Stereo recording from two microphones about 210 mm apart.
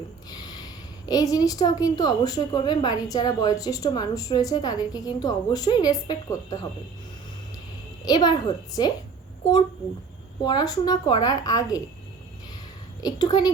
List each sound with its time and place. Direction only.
0.3 s a woman's voice: 20° left (ahead or behind)
8.0 s a woman's voice: 20° left (ahead or behind)
10.4 s a woman's voice: 20° left (ahead or behind)
13.0 s a woman's voice: 20° left (ahead or behind)